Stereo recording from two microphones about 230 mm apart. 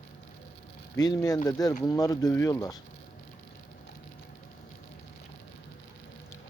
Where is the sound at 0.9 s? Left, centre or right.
Centre.